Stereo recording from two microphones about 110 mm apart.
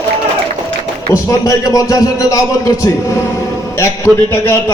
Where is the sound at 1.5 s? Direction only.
35° left (ahead or behind).